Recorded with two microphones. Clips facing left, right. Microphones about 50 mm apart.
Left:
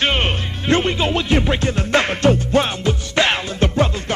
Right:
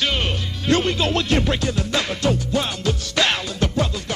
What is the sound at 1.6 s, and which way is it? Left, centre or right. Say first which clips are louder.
Music: left 5 dB; left.